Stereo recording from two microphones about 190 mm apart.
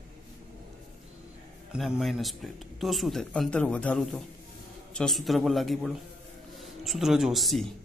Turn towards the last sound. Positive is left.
turn(degrees=0)  # may be behind; listen again after turning